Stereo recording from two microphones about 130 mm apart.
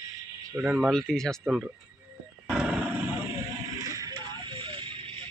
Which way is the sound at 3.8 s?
30° right (ahead or behind).